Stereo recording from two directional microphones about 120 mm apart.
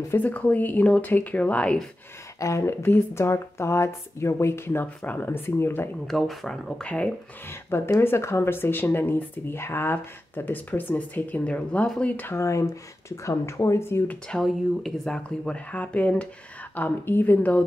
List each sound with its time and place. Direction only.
0.1 s speech: 15° left (ahead or behind)
2.4 s speech: 25° left (ahead or behind)
6.0 s speech: centre (ahead or behind)
7.7 s speech: 20° left (ahead or behind)
14.3 s speech: 5° left (ahead or behind)